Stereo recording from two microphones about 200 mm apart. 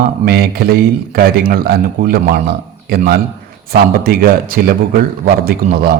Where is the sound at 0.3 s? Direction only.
50° right (ahead or behind).